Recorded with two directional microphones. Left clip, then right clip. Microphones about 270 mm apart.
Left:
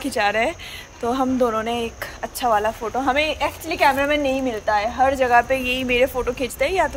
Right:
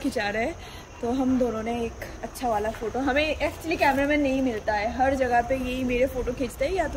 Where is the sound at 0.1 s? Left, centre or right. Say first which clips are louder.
Left 10 dB; centre.